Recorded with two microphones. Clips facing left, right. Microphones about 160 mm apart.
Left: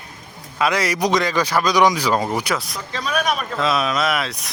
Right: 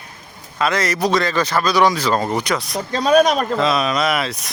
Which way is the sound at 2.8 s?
90° right.